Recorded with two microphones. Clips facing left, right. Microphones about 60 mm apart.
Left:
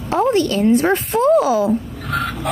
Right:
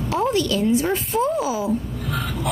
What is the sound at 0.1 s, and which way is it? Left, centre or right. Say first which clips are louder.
Speech: left 5 dB; left.